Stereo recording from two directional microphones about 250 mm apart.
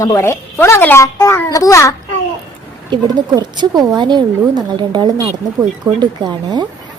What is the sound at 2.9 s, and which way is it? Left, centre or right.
Speech, centre.